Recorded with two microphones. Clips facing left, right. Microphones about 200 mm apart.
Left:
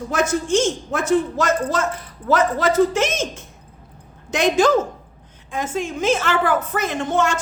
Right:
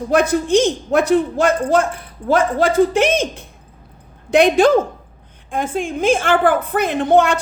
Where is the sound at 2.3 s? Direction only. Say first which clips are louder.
Right 2 dB; 50° right (ahead or behind).